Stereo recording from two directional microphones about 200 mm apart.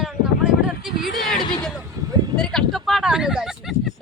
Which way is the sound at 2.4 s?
Centre (ahead or behind).